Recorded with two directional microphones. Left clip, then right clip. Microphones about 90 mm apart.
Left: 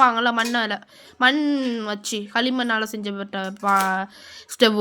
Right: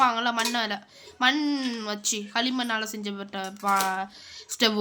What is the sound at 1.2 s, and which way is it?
Speech, 40° left (ahead or behind).